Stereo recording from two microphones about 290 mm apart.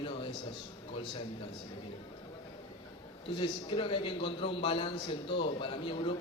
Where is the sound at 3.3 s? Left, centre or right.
Centre.